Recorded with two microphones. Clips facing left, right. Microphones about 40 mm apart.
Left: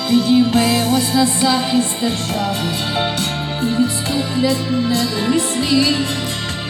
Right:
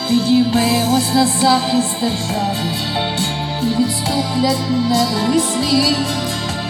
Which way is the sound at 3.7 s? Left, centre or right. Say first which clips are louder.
Left 1 dB; left.